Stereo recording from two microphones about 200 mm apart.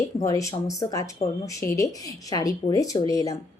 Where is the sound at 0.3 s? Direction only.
15° left (ahead or behind).